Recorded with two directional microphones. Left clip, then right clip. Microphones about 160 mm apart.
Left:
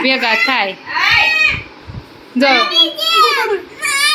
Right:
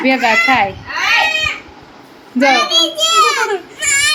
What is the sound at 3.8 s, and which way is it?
Goat, 35° right (ahead or behind).